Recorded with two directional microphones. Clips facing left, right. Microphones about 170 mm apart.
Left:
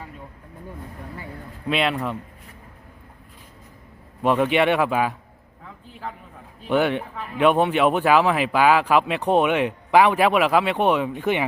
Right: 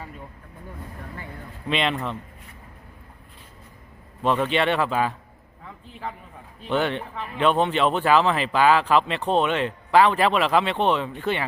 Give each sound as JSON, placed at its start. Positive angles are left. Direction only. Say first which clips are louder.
{"t": 1.6, "sound": "a man's voice", "louder": "left 2 dB", "side_deg": 5}
{"t": 4.2, "sound": "speech", "louder": "left 3 dB", "side_deg": 15}
{"t": 5.6, "sound": "a man's voice", "louder": "even", "side_deg": 0}
{"t": 6.7, "sound": "speech", "louder": "left 3 dB", "side_deg": 10}